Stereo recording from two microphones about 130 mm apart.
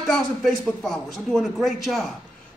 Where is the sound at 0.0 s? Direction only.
5° left (ahead or behind).